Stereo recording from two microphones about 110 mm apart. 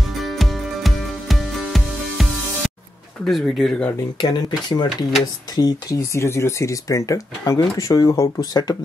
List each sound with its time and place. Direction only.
0.2 s music: centre (ahead or behind)
3.3 s speech: centre (ahead or behind)
4.2 s speech: 40° left (ahead or behind)